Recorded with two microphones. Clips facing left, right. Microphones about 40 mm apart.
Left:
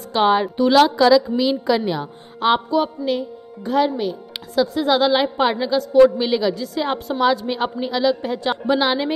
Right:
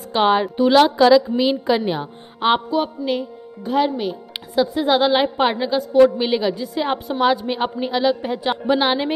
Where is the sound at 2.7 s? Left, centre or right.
Centre.